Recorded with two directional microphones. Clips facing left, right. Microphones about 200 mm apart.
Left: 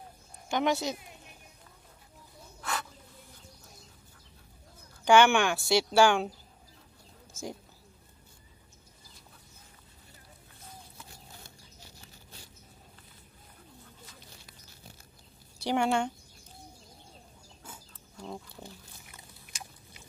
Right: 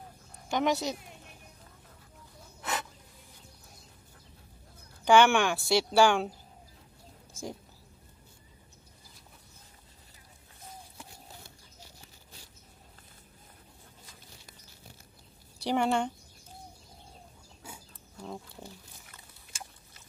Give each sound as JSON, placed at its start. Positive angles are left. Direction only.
{"t": 0.5, "sound": "a woman's voice", "side_deg": 0}
{"t": 2.6, "sound": "snake", "side_deg": -20}
{"t": 5.0, "sound": "speech", "side_deg": 0}
{"t": 15.6, "sound": "speech", "side_deg": 0}
{"t": 17.6, "sound": "a sound", "side_deg": -10}
{"t": 18.2, "sound": "speech", "side_deg": 0}
{"t": 19.1, "sound": "a sound", "side_deg": 15}